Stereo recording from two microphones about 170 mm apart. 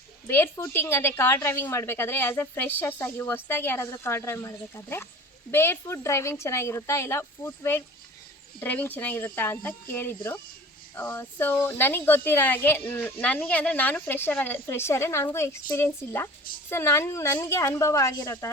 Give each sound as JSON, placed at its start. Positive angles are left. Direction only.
{"t": 0.3, "sound": "a woman's voice", "side_deg": 15}